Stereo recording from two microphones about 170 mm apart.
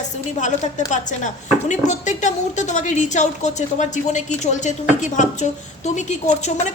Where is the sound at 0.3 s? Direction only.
45° left (ahead or behind).